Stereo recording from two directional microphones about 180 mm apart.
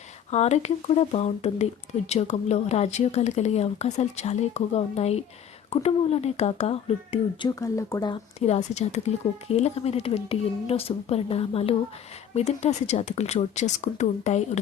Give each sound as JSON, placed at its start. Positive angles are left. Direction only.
{"t": 0.3, "sound": "speech", "side_deg": 40}
{"t": 7.6, "sound": "speech", "side_deg": 20}
{"t": 8.4, "sound": "speech", "side_deg": 35}